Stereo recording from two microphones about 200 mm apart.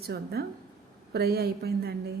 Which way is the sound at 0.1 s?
55° right (ahead or behind).